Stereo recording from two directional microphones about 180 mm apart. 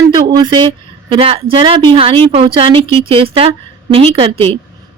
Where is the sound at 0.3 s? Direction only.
25° right (ahead or behind).